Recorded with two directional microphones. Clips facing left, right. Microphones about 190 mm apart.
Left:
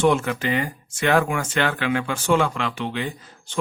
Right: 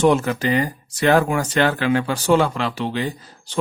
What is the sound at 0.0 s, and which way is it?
Speech, 40° right (ahead or behind).